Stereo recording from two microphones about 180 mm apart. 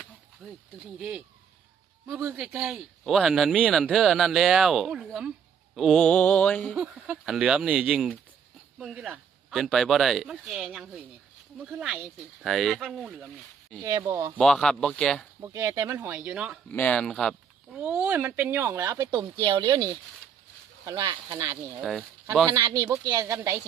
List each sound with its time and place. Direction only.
0.4 s speech: 5° right (ahead or behind)
6.7 s speech: 5° right (ahead or behind)
14.1 s speech: 15° right (ahead or behind)
14.3 s speech: 5° left (ahead or behind)
15.4 s speech: 15° right (ahead or behind)
16.7 s speech: 5° left (ahead or behind)
17.7 s speech: 10° right (ahead or behind)
21.8 s speech: centre (ahead or behind)
22.4 s speech: 20° right (ahead or behind)